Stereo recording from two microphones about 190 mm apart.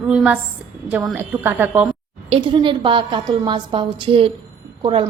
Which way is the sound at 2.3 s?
25° right (ahead or behind).